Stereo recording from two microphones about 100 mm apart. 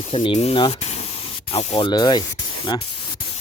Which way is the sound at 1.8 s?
45° left (ahead or behind).